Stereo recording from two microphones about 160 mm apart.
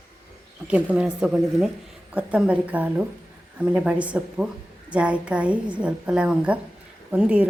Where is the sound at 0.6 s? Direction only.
10° right (ahead or behind).